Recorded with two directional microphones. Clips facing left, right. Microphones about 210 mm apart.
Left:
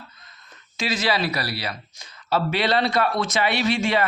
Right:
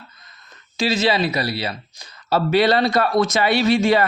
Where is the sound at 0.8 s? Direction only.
25° right (ahead or behind).